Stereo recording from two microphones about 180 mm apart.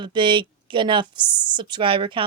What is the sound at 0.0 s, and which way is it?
Speech, 25° right (ahead or behind).